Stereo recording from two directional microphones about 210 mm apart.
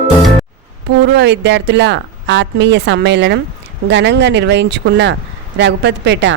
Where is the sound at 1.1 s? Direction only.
55° right (ahead or behind).